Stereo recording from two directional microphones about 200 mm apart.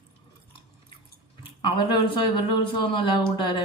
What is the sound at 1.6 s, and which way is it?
Speech, 20° left (ahead or behind).